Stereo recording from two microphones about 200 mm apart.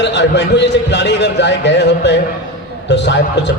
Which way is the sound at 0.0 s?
60° left (ahead or behind).